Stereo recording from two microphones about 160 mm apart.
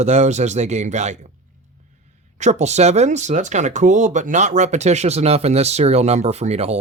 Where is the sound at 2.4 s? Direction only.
45° right (ahead or behind).